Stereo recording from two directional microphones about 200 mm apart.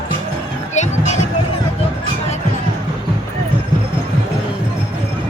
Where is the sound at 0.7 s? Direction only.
35° left (ahead or behind).